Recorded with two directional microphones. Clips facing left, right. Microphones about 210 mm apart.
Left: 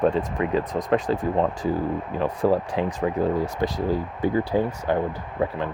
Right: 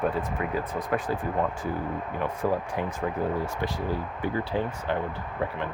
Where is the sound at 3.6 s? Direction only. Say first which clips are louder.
Left 6 dB; 15° left (ahead or behind).